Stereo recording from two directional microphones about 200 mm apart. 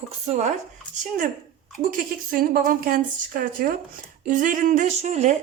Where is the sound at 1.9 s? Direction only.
45° right (ahead or behind).